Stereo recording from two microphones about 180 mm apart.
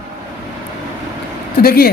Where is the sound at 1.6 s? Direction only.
55° left (ahead or behind).